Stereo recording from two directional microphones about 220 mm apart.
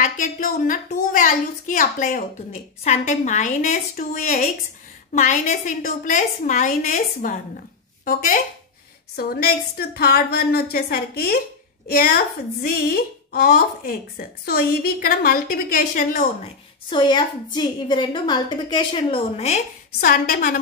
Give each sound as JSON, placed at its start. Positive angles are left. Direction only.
{"t": 0.0, "sound": "a woman's voice", "side_deg": 40}
{"t": 16.9, "sound": "a woman's voice", "side_deg": 20}
{"t": 20.0, "sound": "a woman's voice", "side_deg": 40}